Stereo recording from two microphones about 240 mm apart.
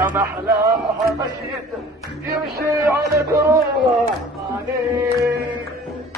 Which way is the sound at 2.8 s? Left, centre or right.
Centre.